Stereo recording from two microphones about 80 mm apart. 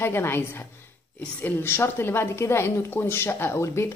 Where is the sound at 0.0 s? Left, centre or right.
Left.